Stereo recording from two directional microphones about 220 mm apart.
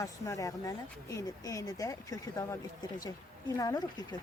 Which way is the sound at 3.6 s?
15° left (ahead or behind).